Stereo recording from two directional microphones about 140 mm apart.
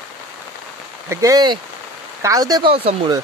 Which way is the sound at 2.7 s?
40° right (ahead or behind).